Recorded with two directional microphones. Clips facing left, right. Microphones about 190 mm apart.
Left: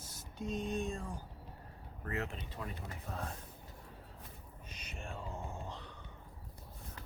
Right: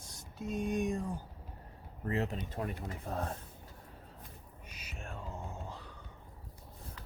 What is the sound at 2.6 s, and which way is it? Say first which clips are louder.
Speech: right 6 dB; 55° right (ahead or behind).